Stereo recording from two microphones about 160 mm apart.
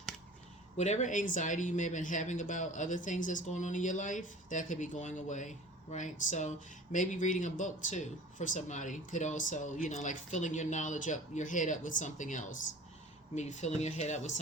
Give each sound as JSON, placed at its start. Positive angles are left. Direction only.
{"t": 0.8, "sound": "speech", "side_deg": 45}